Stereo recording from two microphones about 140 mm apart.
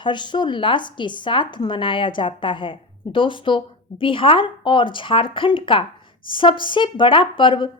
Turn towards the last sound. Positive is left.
turn(degrees=35)  # may be behind; listen again after turning